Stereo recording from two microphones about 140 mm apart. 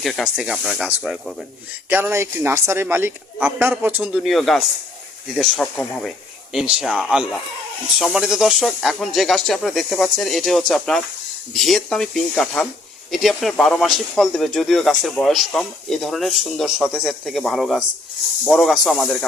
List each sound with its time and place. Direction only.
0.0 s speech: centre (ahead or behind); by 4.1 s 15° right (ahead or behind)
4.1 s speech: centre (ahead or behind)
6.5 s speech: 5° right (ahead or behind)